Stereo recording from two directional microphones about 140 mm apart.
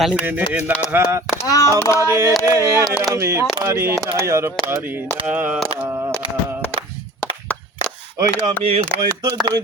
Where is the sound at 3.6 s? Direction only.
15° right (ahead or behind).